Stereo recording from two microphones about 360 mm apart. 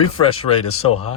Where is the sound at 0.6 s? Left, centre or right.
Left.